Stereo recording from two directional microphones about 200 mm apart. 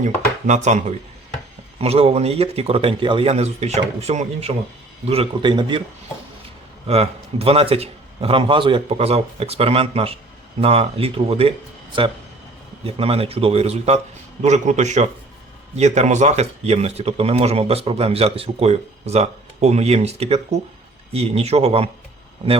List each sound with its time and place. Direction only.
0.0 s a man's voice: 35° right (ahead or behind)
6.8 s a man's voice: 30° right (ahead or behind)
12.8 s a man's voice: 30° right (ahead or behind)